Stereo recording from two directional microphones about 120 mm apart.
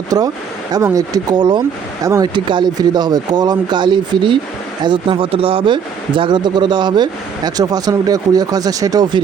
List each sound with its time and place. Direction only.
0.1 s speech: 30° right (ahead or behind)